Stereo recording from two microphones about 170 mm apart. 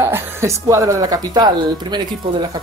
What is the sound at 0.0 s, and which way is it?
Speech, 15° right (ahead or behind).